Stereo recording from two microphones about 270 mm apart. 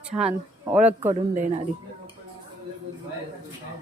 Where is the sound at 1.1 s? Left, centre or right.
Right.